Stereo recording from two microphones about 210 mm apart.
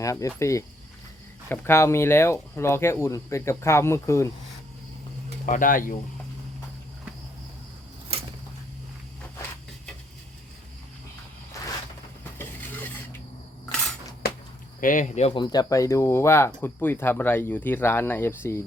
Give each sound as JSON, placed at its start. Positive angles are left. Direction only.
{"t": 0.0, "sound": "speech", "side_deg": 15}
{"t": 5.5, "sound": "speech", "side_deg": 40}
{"t": 12.4, "sound": "dishes", "side_deg": 10}
{"t": 14.8, "sound": "speech", "side_deg": 40}
{"t": 15.4, "sound": "speech", "side_deg": 20}